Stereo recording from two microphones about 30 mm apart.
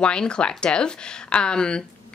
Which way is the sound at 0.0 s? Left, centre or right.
Left.